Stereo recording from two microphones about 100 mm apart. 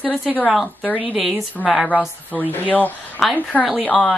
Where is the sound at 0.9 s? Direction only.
15° right (ahead or behind).